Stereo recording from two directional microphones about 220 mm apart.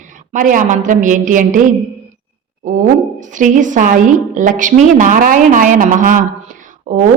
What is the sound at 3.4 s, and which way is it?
Speech, 35° right (ahead or behind).